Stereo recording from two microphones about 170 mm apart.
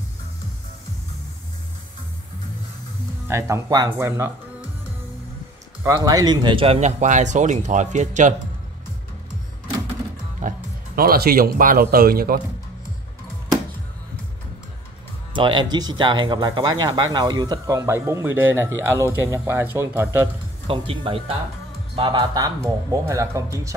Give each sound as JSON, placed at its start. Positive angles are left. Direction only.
{"t": 3.3, "sound": "speech", "side_deg": -15}
{"t": 5.9, "sound": "speech", "side_deg": -20}
{"t": 10.4, "sound": "music", "side_deg": -50}
{"t": 11.0, "sound": "speech", "side_deg": -65}
{"t": 15.3, "sound": "speech", "side_deg": -30}
{"t": 20.6, "sound": "a man's voice", "side_deg": -35}